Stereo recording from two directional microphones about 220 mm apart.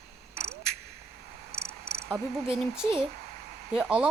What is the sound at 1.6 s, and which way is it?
Cricket, 45° right (ahead or behind).